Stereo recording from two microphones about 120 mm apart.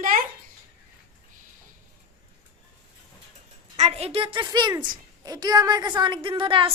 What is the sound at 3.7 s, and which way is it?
A woman's voice, 60° right (ahead or behind).